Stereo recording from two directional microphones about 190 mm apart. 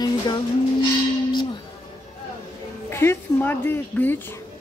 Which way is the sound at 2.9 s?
15° left (ahead or behind).